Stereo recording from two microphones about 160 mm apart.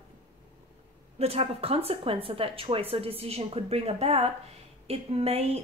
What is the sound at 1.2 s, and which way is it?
Speech, 40° right (ahead or behind).